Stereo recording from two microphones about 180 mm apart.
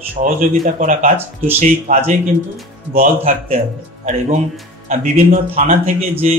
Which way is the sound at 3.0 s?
40° right (ahead or behind).